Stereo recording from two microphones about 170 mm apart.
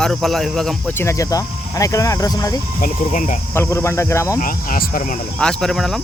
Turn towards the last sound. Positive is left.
turn(degrees=0)  # may be behind; listen again after turning